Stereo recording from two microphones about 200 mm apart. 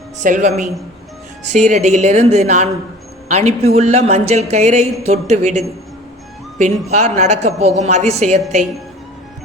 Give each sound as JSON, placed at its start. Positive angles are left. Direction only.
{"t": 0.2, "sound": "speech", "side_deg": -40}